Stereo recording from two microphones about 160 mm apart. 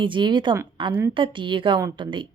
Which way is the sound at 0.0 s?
30° right (ahead or behind).